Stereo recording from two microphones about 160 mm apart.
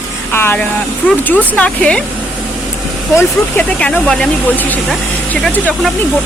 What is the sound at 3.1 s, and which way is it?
Speech, 10° left (ahead or behind).